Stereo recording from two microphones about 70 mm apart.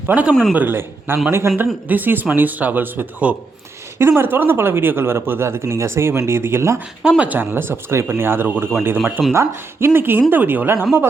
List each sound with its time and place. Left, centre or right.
0.1 s speech: right
1.9 s speech: right
3.9 s speech: right
7.2 s speech: right